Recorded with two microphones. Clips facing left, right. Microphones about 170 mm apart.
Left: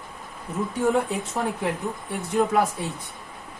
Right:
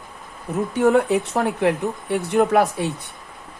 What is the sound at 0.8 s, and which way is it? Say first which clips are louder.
Speech: right 7 dB; 70° right (ahead or behind).